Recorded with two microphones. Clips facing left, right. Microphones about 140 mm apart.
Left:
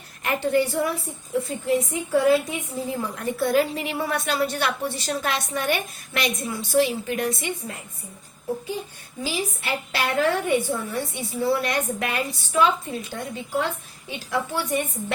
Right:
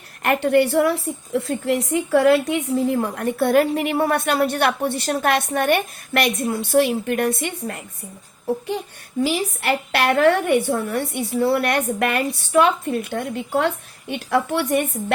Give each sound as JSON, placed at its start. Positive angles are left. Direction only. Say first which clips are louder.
{"t": 0.2, "sound": "a woman's voice", "louder": "right 5 dB", "side_deg": -60}
{"t": 9.2, "sound": "a woman's voice", "louder": "right 7 dB", "side_deg": -65}